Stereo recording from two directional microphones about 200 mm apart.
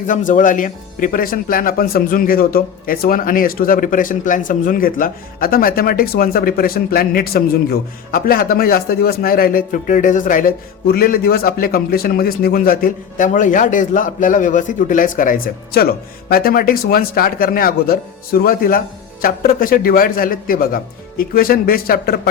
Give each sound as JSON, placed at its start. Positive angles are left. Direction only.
{"t": 0.1, "sound": "speech", "side_deg": 40}